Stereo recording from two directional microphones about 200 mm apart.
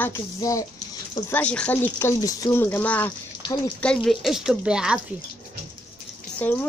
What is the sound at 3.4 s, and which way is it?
Speech, 20° left (ahead or behind).